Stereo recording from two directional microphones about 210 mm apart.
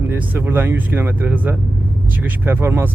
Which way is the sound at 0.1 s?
10° right (ahead or behind).